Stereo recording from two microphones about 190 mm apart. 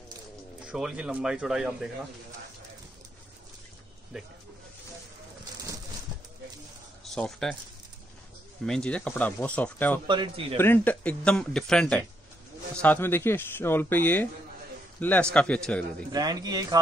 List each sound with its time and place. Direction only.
0.7 s speech: 5° right (ahead or behind)
4.1 s speech: 5° right (ahead or behind)
7.2 s speech: 5° left (ahead or behind)
8.6 s a man's voice: 5° left (ahead or behind)
10.0 s a man's voice: 25° right (ahead or behind)
10.6 s a man's voice: 10° left (ahead or behind)
16.1 s a man's voice: 20° right (ahead or behind)